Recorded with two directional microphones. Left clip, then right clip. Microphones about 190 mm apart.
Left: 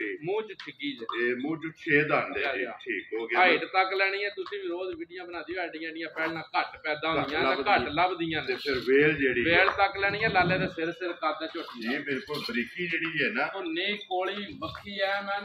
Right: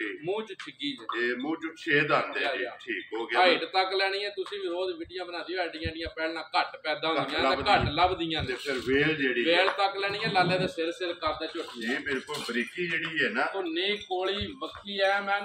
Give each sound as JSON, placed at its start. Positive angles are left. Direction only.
{"t": 1.1, "sound": "a man's voice", "side_deg": -35}
{"t": 5.5, "sound": "a man's voice", "side_deg": -35}
{"t": 12.5, "sound": "speech", "side_deg": -30}
{"t": 15.0, "sound": "speech", "side_deg": -5}